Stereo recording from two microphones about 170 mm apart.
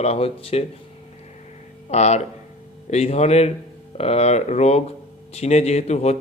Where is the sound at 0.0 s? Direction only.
35° left (ahead or behind).